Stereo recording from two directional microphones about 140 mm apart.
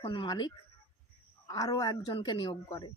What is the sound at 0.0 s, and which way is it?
Speech, 40° left (ahead or behind).